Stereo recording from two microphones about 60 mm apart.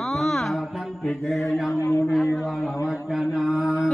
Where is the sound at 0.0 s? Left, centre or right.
Centre.